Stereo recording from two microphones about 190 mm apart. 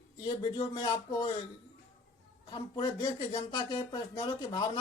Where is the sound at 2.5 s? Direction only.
25° left (ahead or behind).